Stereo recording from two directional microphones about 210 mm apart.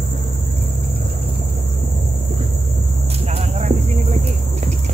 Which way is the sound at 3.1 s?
30° right (ahead or behind).